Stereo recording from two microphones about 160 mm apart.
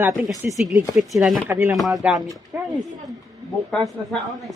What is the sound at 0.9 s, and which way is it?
Chopping, centre (ahead or behind).